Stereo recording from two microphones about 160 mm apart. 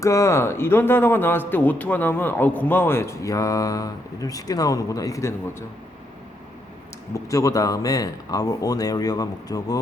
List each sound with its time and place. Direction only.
0.0 s a man's voice: 20° left (ahead or behind)
7.1 s speech: 20° left (ahead or behind)